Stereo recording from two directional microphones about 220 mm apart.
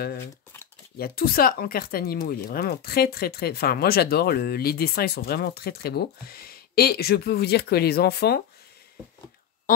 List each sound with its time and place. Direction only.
0.9 s speech: 45° left (ahead or behind)